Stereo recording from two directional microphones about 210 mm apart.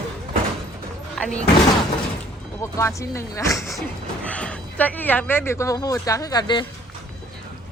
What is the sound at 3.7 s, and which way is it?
Speech, 5° left (ahead or behind).